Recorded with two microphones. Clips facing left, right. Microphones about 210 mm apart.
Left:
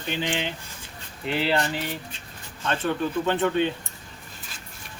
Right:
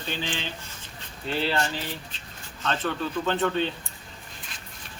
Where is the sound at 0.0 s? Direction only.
15° left (ahead or behind).